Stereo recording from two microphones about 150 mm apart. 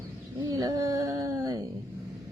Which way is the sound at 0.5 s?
25° right (ahead or behind).